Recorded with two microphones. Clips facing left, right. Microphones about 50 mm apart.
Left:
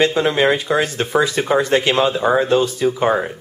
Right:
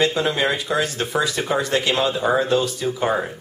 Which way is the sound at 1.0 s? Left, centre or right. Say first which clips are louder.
Left 5 dB; centre.